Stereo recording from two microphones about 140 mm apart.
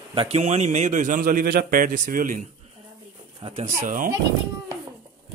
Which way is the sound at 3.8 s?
90° right.